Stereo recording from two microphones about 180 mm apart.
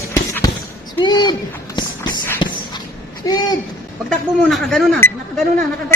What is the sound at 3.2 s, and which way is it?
Speech, 20° left (ahead or behind).